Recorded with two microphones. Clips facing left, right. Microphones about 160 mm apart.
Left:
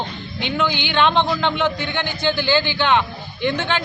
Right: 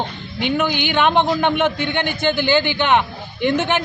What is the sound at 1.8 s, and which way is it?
Speech, 55° right (ahead or behind).